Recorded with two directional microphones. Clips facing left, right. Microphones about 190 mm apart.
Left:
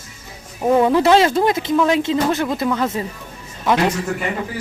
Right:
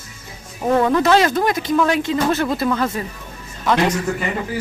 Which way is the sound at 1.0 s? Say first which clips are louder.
Left 2 dB; 25° left (ahead or behind).